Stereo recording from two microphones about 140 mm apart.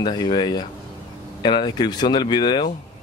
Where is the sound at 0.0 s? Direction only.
35° left (ahead or behind).